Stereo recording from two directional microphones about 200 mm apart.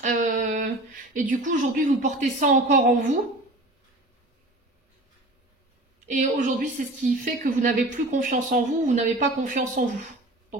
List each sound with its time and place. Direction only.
0.0 s a sound: 40° right (ahead or behind)
1.3 s a woman's voice: 40° right (ahead or behind)
6.0 s a woman's voice: 40° right (ahead or behind)